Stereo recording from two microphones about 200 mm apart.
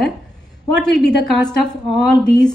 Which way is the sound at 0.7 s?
5° left (ahead or behind).